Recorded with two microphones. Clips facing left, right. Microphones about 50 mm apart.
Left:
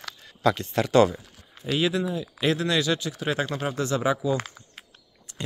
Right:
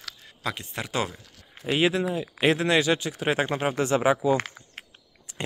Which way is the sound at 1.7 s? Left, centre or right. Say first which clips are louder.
Right 1 dB; right.